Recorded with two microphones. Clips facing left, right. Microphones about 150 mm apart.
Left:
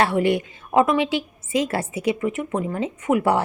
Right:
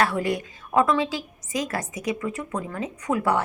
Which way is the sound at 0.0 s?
25° left (ahead or behind).